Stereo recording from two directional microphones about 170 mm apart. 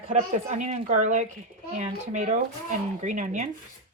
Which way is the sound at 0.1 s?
45° right (ahead or behind).